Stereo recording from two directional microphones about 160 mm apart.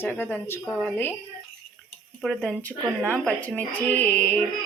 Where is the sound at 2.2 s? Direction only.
Centre (ahead or behind).